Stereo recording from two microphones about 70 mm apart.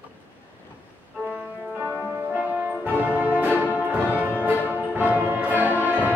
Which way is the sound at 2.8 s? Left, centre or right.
Right.